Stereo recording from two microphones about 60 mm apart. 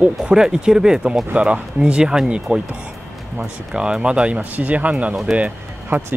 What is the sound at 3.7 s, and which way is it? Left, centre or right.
Speech, centre.